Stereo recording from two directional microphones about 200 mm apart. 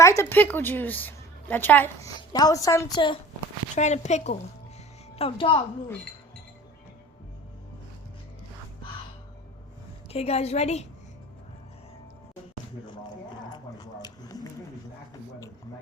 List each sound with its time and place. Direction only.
0.0 s a woman's voice: 15° left (ahead or behind)
3.8 s a woman's voice: 35° left (ahead or behind)
10.1 s a woman's voice: 30° left (ahead or behind)
13.5 s a sound: 20° left (ahead or behind)